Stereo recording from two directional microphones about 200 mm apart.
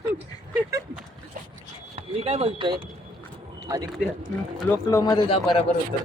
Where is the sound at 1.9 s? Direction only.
30° right (ahead or behind).